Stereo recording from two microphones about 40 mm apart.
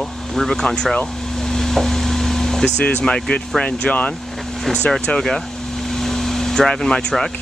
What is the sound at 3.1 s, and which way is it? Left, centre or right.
Speech, left.